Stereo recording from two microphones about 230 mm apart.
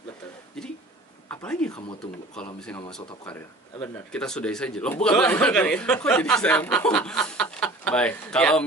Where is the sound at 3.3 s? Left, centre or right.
Centre.